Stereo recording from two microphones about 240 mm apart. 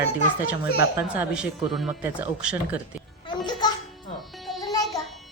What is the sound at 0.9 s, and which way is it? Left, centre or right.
Music, centre.